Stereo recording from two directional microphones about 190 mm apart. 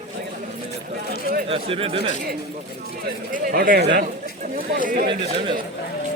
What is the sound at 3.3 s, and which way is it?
Speech, 45° right (ahead or behind).